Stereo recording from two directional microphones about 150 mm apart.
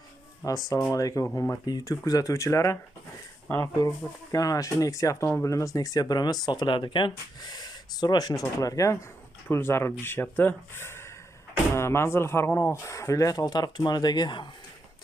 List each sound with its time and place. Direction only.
0.4 s speech: 25° left (ahead or behind)